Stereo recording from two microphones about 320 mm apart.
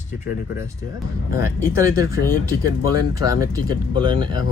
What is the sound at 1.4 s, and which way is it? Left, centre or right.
Speech, centre.